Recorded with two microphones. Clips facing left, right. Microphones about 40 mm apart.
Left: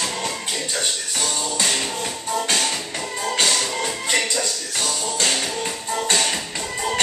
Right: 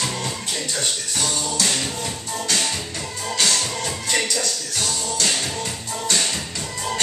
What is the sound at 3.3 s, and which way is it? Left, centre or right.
Music, left.